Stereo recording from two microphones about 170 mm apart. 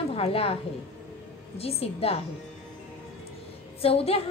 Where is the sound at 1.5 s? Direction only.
35° left (ahead or behind).